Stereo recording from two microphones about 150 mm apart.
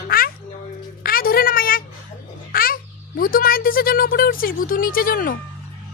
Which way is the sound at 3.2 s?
70° left (ahead or behind).